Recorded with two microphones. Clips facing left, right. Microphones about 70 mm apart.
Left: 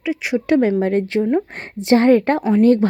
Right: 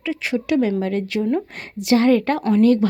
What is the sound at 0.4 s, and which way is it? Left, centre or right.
Speech, left.